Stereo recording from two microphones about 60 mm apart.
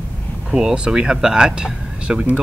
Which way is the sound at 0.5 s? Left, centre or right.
Centre.